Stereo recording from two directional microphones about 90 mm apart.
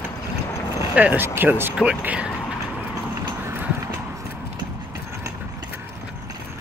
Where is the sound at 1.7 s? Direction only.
10° right (ahead or behind).